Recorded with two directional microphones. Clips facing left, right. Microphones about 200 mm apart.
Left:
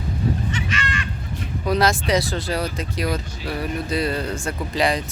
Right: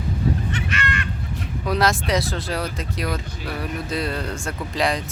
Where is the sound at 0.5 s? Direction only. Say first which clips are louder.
Even; 60° right (ahead or behind).